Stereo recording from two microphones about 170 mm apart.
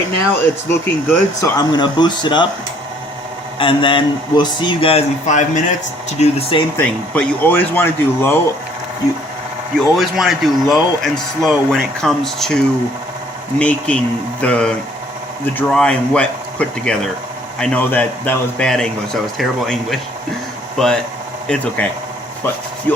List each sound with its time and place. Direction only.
0.7 s a man's voice: 15° left (ahead or behind)
3.6 s a man's voice: 30° left (ahead or behind)
6.7 s speech: 10° left (ahead or behind)
9.9 s speech: centre (ahead or behind)